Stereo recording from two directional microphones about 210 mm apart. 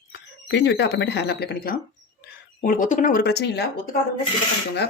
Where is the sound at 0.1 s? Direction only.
55° left (ahead or behind).